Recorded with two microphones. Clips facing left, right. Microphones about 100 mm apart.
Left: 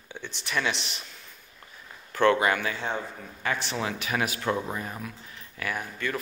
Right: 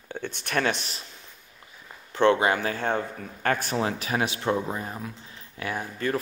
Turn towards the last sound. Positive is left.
turn(degrees=-35)  # may be behind; listen again after turning